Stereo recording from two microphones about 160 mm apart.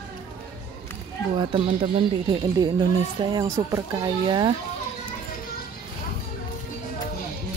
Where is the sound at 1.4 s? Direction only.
35° right (ahead or behind).